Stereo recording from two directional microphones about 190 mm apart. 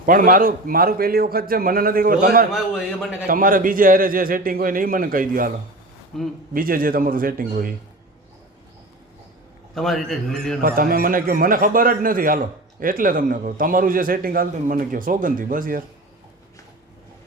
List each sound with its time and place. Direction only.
0.0 s speech: 45° right (ahead or behind)
2.5 s a man's voice: 5° right (ahead or behind)
3.2 s speech: 45° right (ahead or behind)
6.1 s a man's voice: centre (ahead or behind)
6.5 s speech: 50° right (ahead or behind)
9.7 s a man's voice: centre (ahead or behind)
10.6 s speech: 45° right (ahead or behind)